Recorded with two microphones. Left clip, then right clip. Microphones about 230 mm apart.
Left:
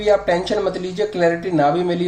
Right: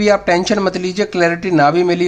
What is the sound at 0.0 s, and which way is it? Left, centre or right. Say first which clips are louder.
Speech: right 3 dB; right.